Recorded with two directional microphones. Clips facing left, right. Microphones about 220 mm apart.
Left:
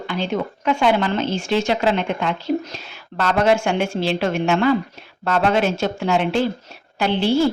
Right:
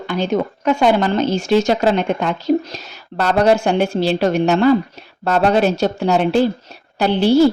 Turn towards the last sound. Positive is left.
turn(degrees=-40)  # may be behind; listen again after turning